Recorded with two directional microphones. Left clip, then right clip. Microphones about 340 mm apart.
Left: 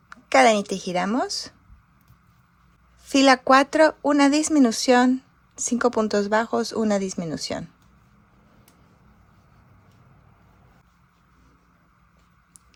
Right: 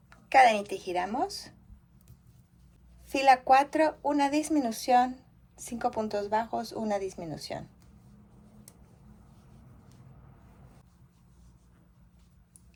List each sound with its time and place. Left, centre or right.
0.1 s speech: left
3.0 s speech: left